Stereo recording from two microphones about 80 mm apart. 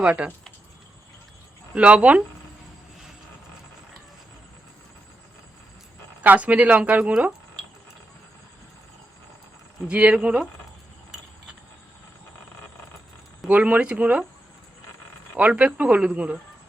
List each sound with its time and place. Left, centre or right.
0.0 s speech: centre
1.7 s speech: centre
6.2 s speech: centre
9.9 s speech: centre
13.5 s speech: centre
15.4 s speech: centre